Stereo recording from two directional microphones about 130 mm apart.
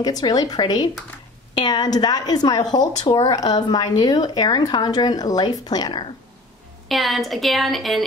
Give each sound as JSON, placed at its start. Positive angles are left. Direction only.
{"t": 0.0, "sound": "speech", "side_deg": 30}
{"t": 6.9, "sound": "a woman's voice", "side_deg": 0}